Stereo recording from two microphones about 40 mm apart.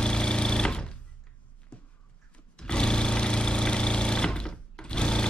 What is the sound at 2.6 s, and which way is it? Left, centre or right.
Sewing machine, left.